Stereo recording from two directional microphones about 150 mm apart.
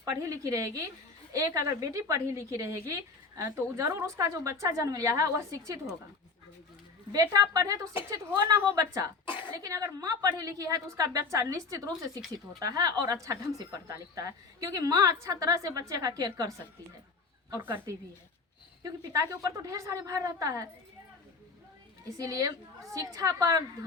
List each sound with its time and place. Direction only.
0.0 s a woman's voice: 20° right (ahead or behind)
7.1 s a woman's voice: 25° right (ahead or behind)
22.2 s a woman's voice: 20° right (ahead or behind)